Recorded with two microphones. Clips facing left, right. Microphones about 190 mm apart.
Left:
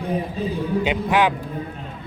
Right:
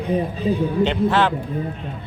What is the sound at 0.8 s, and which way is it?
Speech, 10° left (ahead or behind).